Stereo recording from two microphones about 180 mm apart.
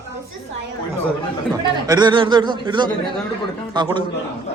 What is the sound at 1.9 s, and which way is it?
A man's voice, 25° right (ahead or behind).